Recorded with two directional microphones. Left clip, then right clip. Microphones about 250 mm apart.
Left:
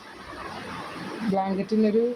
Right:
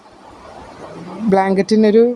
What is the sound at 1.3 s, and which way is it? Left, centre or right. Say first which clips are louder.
Speech: right 12 dB; right.